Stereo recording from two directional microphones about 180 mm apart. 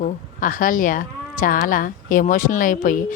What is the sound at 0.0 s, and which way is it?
Speech, 50° left (ahead or behind).